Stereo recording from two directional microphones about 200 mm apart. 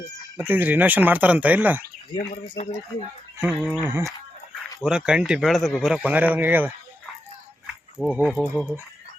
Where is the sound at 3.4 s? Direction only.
5° right (ahead or behind).